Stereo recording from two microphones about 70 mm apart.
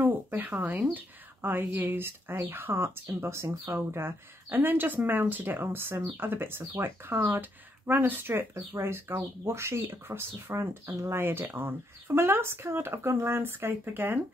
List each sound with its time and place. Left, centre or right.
0.0 s speech: right